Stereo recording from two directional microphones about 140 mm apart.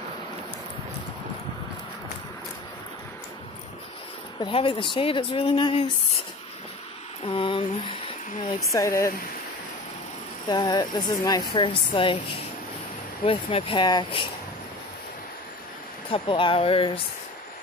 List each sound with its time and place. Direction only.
4.4 s speech: 40° left (ahead or behind)
7.2 s speech: 40° left (ahead or behind)
8.7 s speech: 20° left (ahead or behind)
10.5 s speech: 30° left (ahead or behind)
16.1 s speech: 35° left (ahead or behind)